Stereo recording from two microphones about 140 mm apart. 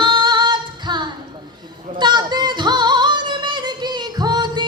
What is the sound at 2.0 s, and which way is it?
Music, 30° right (ahead or behind).